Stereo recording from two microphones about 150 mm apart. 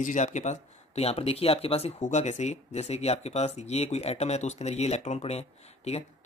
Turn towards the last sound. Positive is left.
turn(degrees=45)  # may be behind; listen again after turning